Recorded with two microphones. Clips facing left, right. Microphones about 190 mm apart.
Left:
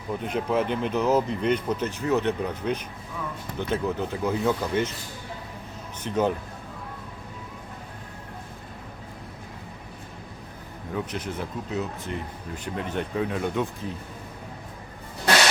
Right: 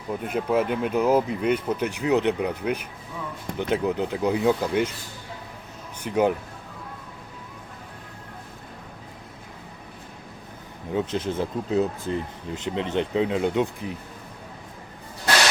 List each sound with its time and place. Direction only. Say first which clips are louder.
0.1 s speech: right 2 dB; 5° right (ahead or behind)
6.0 s speech: right 3 dB; 10° right (ahead or behind)
10.9 s speech: right 5 dB; 25° right (ahead or behind)